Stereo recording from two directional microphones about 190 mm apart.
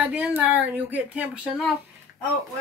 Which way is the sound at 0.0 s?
5° right (ahead or behind).